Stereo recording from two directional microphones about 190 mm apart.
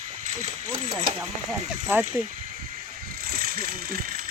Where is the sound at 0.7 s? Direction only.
20° right (ahead or behind).